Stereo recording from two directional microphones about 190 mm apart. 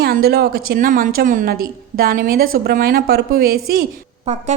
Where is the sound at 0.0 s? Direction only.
55° right (ahead or behind).